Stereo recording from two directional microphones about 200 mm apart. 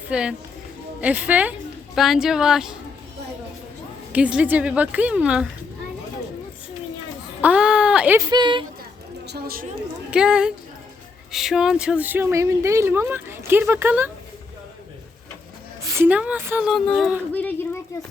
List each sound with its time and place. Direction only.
0.1 s a woman's voice: 5° right (ahead or behind)
4.1 s a woman's voice: 5° right (ahead or behind)
7.4 s a sound: 5° right (ahead or behind)
8.3 s speech: 20° right (ahead or behind)
9.2 s a woman's voice: 50° right (ahead or behind)
10.1 s a woman's voice: 5° right (ahead or behind)
15.8 s a woman's voice: 10° right (ahead or behind); by 17.7 s 10° left (ahead or behind)